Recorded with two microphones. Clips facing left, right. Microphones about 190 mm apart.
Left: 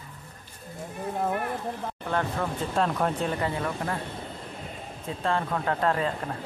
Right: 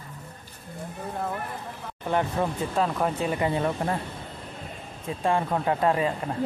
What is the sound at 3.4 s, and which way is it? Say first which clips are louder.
Speech: right 4 dB; 20° right (ahead or behind).